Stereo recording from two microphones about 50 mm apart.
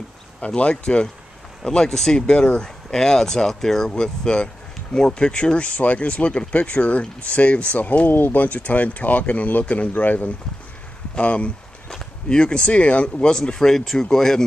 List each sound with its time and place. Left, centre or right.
0.6 s speech: left
8.1 s speech: left; by 14.4 s centre